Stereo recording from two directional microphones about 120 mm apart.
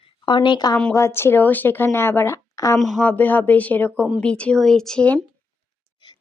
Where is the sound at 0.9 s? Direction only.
20° left (ahead or behind).